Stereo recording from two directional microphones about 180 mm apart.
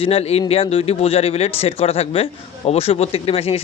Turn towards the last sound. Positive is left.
turn(degrees=35)  # may be behind; listen again after turning